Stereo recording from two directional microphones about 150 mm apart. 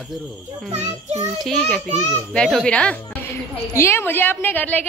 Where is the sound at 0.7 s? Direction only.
45° right (ahead or behind).